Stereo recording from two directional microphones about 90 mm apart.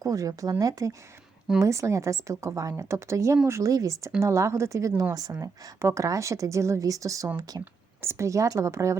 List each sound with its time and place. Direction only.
0.0 s a woman's voice: 40° right (ahead or behind)
7.6 s speech: 30° right (ahead or behind)